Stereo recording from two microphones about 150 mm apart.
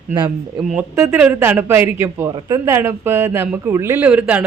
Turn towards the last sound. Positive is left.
turn(degrees=-10)  # may be behind; listen again after turning